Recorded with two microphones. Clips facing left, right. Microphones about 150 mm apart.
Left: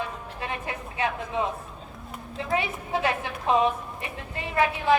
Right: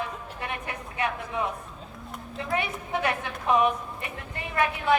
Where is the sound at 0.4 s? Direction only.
25° left (ahead or behind).